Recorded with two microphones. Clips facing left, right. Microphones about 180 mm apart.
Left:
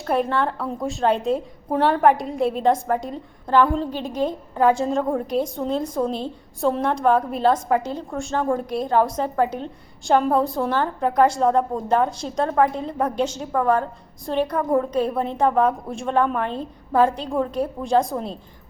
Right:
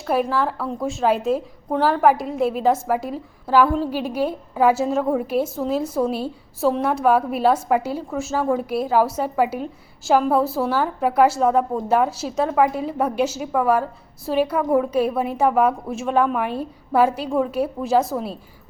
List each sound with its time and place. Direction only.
0.0 s a woman's voice: 5° right (ahead or behind)